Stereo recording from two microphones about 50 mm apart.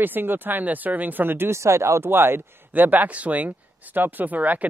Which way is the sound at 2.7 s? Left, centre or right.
Right.